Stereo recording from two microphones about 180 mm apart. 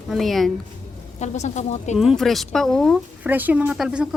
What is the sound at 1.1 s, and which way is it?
Speech, 40° left (ahead or behind).